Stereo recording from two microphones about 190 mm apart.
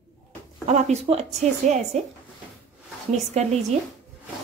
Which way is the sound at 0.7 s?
35° right (ahead or behind).